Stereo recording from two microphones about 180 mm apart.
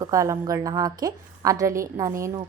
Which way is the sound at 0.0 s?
15° right (ahead or behind).